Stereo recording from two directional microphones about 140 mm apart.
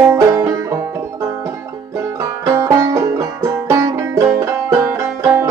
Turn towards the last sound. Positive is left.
turn(degrees=-15)  # may be behind; listen again after turning